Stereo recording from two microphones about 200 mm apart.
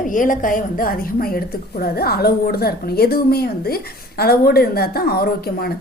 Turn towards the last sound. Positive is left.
turn(degrees=50)  # may be behind; listen again after turning